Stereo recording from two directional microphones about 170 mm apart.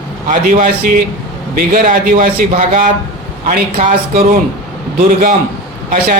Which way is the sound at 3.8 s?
45° right (ahead or behind).